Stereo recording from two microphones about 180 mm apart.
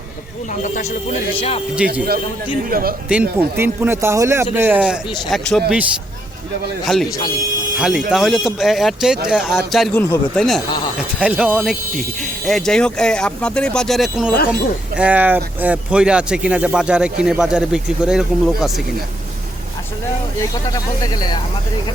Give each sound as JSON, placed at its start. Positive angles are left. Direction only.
{"t": 0.7, "sound": "speech", "side_deg": 40}
{"t": 2.6, "sound": "speech", "side_deg": -55}
{"t": 3.1, "sound": "speech", "side_deg": -10}
{"t": 6.8, "sound": "speech", "side_deg": 0}
{"t": 9.9, "sound": "speech", "side_deg": 10}
{"t": 20.7, "sound": "speech", "side_deg": 20}